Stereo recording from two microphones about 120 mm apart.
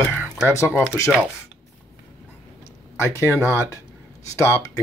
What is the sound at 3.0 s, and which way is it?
Speech, 25° left (ahead or behind).